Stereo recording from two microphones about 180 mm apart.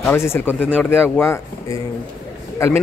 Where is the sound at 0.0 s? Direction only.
10° left (ahead or behind).